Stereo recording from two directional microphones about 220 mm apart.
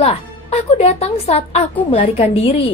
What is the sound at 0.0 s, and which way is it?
A woman's voice, 30° left (ahead or behind).